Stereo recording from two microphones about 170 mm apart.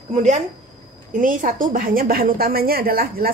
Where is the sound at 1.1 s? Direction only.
50° right (ahead or behind).